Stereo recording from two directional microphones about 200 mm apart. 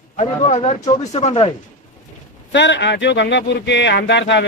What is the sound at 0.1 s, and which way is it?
A man's voice, 35° left (ahead or behind).